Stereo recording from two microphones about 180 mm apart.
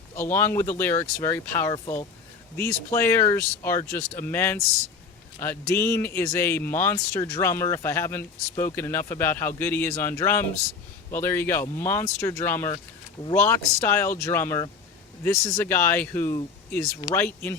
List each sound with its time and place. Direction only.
0.3 s speech: 15° left (ahead or behind)